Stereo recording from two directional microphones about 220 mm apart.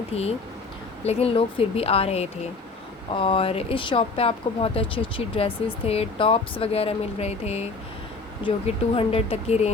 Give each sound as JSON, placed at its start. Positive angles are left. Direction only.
{"t": 0.1, "sound": "speech", "side_deg": 30}